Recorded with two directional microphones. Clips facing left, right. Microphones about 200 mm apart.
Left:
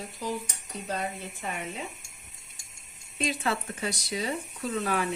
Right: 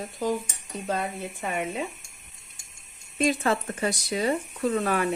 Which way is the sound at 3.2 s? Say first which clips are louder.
Right 6 dB; 50° right (ahead or behind).